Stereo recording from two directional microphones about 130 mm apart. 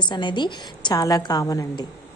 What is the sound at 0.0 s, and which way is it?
A woman's voice, 35° left (ahead or behind).